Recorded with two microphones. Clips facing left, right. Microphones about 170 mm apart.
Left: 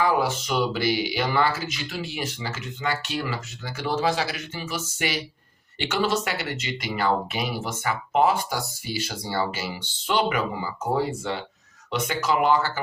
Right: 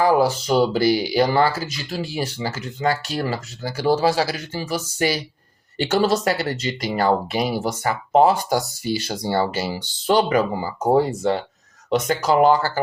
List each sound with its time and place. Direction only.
0.0 s speech: 35° right (ahead or behind)